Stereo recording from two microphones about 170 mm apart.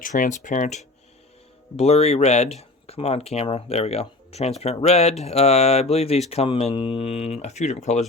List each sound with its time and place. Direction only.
0.0 s speech: 50° left (ahead or behind)